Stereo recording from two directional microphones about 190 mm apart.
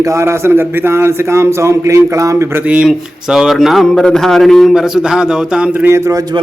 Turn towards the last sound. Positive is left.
turn(degrees=-20)  # may be behind; listen again after turning